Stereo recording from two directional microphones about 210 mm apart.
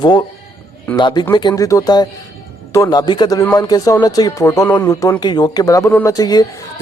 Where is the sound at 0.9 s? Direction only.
20° left (ahead or behind).